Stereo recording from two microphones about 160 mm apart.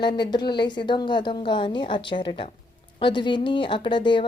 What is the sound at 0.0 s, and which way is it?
A woman's voice, 30° left (ahead or behind).